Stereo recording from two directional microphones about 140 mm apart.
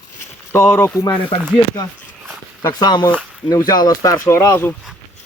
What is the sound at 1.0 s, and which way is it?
Speech, 30° left (ahead or behind).